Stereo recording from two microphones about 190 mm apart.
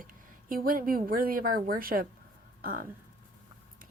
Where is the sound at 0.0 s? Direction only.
45° right (ahead or behind).